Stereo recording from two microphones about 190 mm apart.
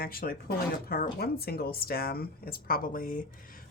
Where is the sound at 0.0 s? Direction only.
50° left (ahead or behind).